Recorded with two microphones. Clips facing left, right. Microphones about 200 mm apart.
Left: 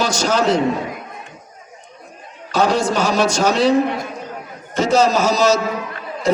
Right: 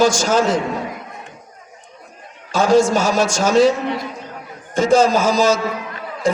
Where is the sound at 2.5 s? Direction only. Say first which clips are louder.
Right 3 dB; 45° right (ahead or behind).